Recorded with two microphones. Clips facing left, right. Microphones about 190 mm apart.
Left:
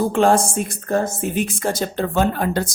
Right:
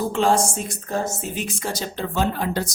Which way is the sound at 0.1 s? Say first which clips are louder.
Left 4 dB; 55° left (ahead or behind).